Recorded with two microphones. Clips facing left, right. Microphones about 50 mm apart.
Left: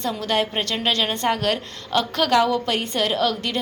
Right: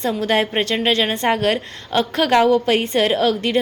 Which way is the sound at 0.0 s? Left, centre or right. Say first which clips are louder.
Right 4 dB; right.